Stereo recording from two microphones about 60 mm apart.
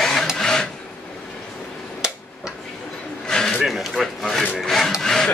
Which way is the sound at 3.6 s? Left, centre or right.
Centre.